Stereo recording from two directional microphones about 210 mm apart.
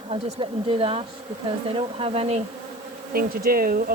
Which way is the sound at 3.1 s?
45° right (ahead or behind).